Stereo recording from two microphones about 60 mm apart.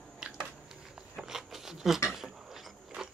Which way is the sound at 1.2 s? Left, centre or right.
Centre.